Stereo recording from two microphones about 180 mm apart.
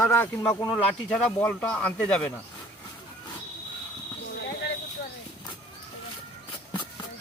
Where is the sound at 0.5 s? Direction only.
20° left (ahead or behind).